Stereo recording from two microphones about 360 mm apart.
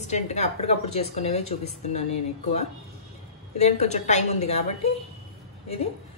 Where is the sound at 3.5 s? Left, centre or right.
Centre.